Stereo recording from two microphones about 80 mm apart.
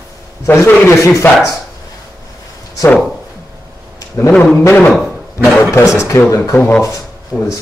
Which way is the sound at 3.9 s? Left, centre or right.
Left.